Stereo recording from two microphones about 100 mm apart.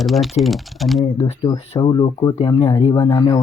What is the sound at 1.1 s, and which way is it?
Speech, 90° left.